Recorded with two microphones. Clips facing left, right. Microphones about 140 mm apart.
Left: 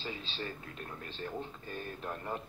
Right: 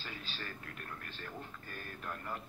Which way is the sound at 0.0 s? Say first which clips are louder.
Left 6 dB; 25° left (ahead or behind).